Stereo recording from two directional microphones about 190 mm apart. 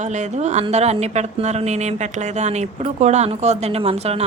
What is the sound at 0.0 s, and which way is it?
A woman's voice, 40° right (ahead or behind).